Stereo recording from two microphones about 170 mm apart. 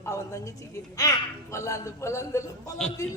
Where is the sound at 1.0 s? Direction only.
20° left (ahead or behind).